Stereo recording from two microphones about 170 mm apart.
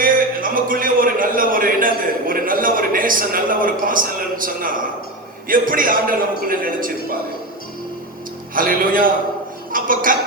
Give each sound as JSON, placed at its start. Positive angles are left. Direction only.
{"t": 0.0, "sound": "a sound", "side_deg": -55}
{"t": 5.5, "sound": "a man's voice", "side_deg": -55}
{"t": 8.5, "sound": "a man's voice", "side_deg": -55}